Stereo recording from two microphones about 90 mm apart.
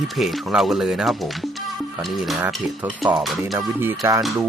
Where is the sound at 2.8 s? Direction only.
20° right (ahead or behind).